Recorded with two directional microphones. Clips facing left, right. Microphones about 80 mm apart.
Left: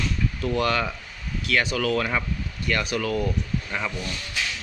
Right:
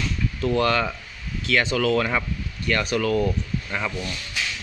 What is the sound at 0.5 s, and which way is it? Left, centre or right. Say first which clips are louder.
Speech: right 3 dB; centre.